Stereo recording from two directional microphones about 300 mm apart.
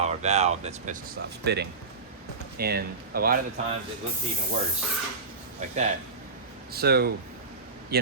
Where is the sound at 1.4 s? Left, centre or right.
Right.